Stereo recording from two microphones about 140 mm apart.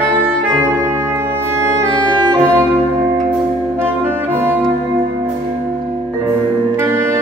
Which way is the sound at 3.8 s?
15° right (ahead or behind).